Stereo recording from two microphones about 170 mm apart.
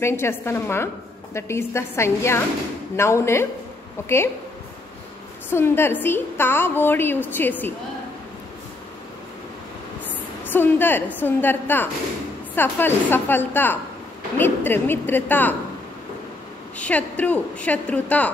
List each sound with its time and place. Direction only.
0.0 s a woman's voice: 15° left (ahead or behind)
5.5 s a woman's voice: 15° left (ahead or behind)
10.4 s a woman's voice: 10° left (ahead or behind)
16.7 s a woman's voice: 10° left (ahead or behind)